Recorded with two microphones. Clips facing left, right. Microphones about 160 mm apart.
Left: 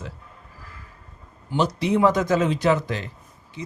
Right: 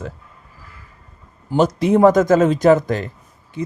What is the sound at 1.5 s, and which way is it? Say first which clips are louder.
Speech: right 6 dB; 45° right (ahead or behind).